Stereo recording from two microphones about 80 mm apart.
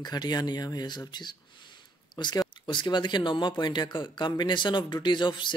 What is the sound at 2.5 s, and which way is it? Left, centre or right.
Speech, left.